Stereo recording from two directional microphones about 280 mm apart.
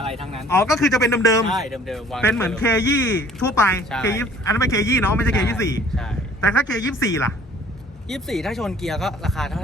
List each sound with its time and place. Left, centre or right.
0.0 s a sound: centre
0.3 s speech: centre
1.5 s speech: centre